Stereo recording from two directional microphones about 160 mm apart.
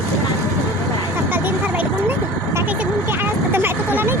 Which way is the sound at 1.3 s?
10° right (ahead or behind).